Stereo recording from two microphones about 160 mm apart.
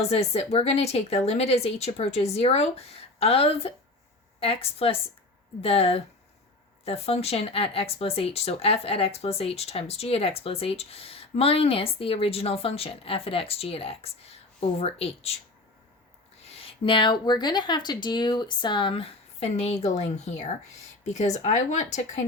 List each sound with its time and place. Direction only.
0.0 s speech: 40° left (ahead or behind)
16.4 s speech: 40° left (ahead or behind)